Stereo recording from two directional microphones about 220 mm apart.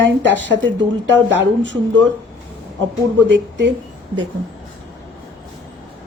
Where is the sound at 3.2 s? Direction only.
55° right (ahead or behind).